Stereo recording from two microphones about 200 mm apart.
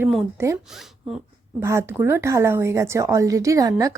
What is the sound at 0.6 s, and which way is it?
Speech, centre (ahead or behind).